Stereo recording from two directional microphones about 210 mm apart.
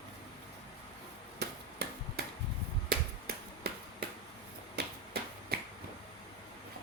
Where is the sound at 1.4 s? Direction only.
50° right (ahead or behind).